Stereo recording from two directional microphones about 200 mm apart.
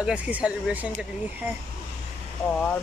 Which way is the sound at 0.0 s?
5° right (ahead or behind).